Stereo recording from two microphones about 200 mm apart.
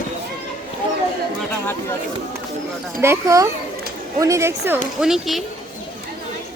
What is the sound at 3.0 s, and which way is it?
Speech, 15° right (ahead or behind).